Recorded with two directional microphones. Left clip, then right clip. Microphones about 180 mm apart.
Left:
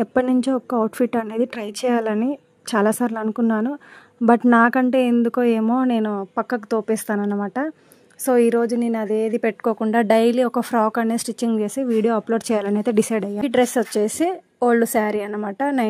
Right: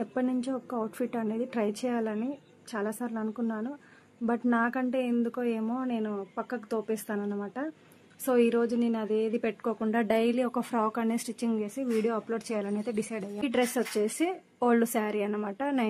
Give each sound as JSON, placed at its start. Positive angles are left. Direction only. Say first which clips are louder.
{"t": 0.0, "sound": "a woman's voice", "louder": "left 12 dB", "side_deg": 65}
{"t": 8.3, "sound": "a woman's voice", "louder": "left 8 dB", "side_deg": 40}